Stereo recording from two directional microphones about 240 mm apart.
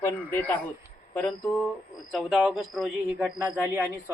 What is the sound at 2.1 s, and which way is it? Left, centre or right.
A man's voice, centre.